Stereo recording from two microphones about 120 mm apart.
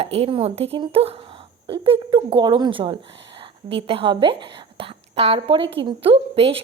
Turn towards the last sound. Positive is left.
turn(degrees=-55)  # may be behind; listen again after turning